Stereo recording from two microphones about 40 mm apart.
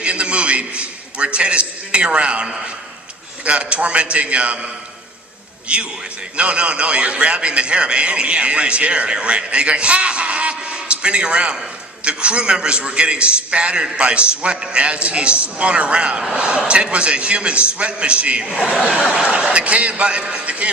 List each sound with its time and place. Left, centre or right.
0.0 s a man's voice: right
18.4 s speech: centre
18.7 s a man's voice: right